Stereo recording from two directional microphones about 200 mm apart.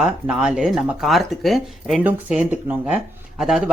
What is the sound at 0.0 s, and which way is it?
Speech, 5° right (ahead or behind).